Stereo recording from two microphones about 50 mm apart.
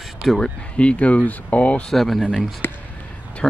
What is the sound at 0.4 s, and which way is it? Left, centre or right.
Speech, left.